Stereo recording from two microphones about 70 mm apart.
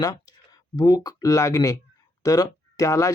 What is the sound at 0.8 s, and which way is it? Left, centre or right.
Speech, left.